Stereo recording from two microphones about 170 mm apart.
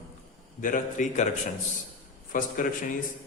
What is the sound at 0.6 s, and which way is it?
Speech, 50° left (ahead or behind).